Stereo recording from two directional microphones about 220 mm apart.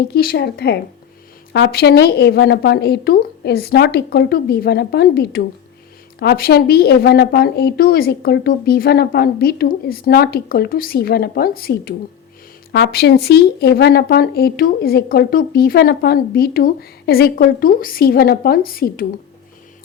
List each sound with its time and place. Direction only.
0.1 s a woman's voice: 45° left (ahead or behind)